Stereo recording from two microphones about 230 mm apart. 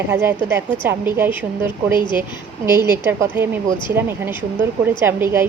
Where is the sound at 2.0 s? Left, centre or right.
Centre.